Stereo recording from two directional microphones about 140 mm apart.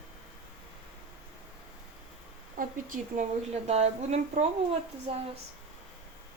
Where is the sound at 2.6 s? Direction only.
80° right.